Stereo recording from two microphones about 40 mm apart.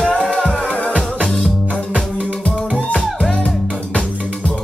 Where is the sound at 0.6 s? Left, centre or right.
Left.